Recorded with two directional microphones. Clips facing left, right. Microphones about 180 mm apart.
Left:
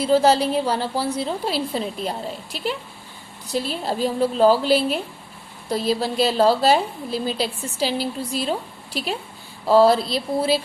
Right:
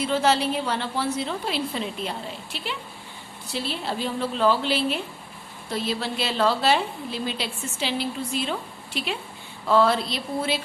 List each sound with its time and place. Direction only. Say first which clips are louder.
0.0 s a woman's voice: left 5 dB; 35° left (ahead or behind)